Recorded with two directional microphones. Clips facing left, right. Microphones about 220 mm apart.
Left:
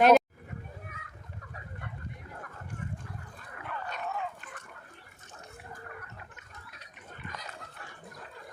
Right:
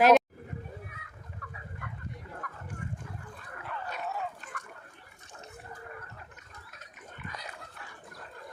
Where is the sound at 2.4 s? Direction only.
30° left (ahead or behind).